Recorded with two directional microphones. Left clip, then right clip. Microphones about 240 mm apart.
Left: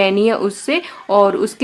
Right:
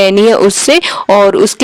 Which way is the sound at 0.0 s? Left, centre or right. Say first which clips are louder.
Right 8 dB; right.